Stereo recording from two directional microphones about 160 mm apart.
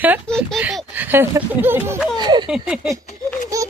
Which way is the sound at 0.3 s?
5° left (ahead or behind).